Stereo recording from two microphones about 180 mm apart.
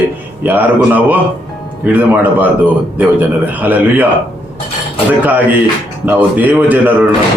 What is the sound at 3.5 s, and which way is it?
Speech, 10° right (ahead or behind).